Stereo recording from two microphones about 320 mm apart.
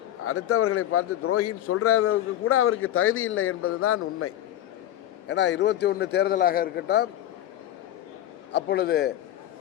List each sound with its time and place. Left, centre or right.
0.3 s a man's voice: left
5.3 s a man's voice: left
8.5 s a man's voice: left